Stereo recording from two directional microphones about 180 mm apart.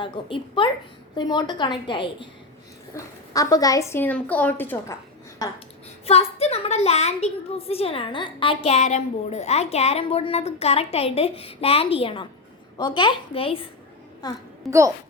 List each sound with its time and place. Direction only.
0.0 s a woman's voice: 30° left (ahead or behind); by 4.9 s 10° left (ahead or behind)
6.1 s a woman's voice: 35° left (ahead or behind)
14.7 s a woman's voice: 15° right (ahead or behind)